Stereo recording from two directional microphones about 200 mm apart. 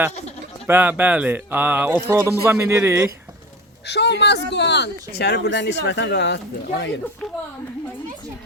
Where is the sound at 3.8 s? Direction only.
60° left (ahead or behind).